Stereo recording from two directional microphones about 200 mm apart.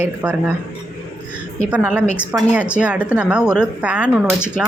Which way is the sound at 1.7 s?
5° right (ahead or behind).